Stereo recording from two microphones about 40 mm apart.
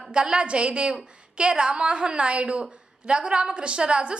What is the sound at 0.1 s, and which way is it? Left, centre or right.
A woman's voice, right.